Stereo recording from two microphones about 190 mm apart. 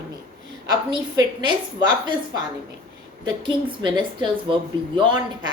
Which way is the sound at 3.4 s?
25° right (ahead or behind).